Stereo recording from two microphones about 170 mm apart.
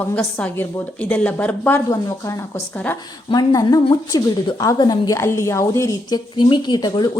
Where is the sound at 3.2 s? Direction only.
25° left (ahead or behind).